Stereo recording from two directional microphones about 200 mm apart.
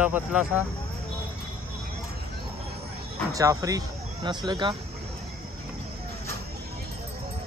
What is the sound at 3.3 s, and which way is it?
Speech, 15° right (ahead or behind).